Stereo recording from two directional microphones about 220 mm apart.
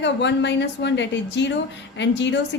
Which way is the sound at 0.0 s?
55° left (ahead or behind).